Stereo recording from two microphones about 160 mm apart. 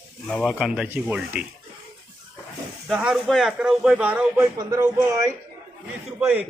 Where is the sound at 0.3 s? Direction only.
Centre (ahead or behind).